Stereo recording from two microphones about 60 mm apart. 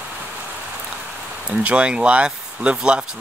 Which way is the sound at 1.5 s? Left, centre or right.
Right.